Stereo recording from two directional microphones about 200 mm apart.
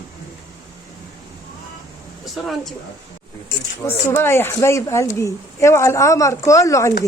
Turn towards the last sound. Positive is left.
turn(degrees=15)  # may be behind; listen again after turning